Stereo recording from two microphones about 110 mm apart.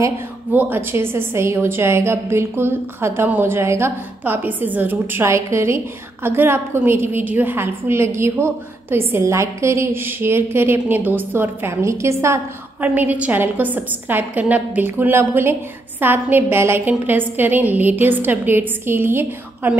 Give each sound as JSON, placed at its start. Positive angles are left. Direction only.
{"t": 0.5, "sound": "a woman's voice", "side_deg": -15}
{"t": 12.8, "sound": "a woman's voice", "side_deg": -15}